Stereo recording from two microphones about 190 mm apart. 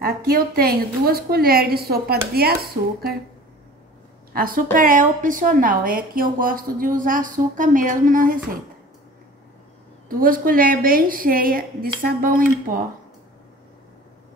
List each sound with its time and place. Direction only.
0.0 s a woman's voice: 50° right (ahead or behind)
4.3 s a woman's voice: 50° right (ahead or behind)
10.0 s a woman's voice: 50° right (ahead or behind)